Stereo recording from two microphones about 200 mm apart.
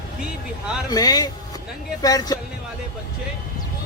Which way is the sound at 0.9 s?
20° left (ahead or behind).